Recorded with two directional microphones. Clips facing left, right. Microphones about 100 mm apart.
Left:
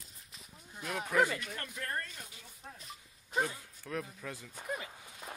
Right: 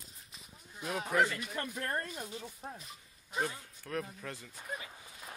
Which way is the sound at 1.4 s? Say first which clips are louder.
Right 4 dB; 20° right (ahead or behind).